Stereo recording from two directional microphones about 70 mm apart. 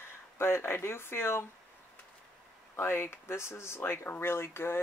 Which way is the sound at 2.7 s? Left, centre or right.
Left.